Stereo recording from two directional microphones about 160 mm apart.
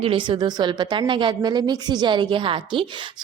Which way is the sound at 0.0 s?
30° right (ahead or behind).